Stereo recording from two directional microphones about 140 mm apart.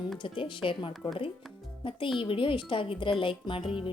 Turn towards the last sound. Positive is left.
turn(degrees=40)  # may be behind; listen again after turning